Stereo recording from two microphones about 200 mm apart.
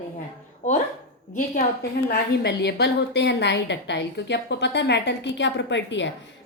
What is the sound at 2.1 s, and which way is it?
A woman's voice, 55° left (ahead or behind).